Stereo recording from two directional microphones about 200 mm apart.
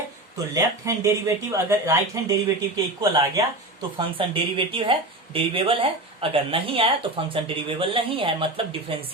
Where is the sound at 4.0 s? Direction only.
25° right (ahead or behind).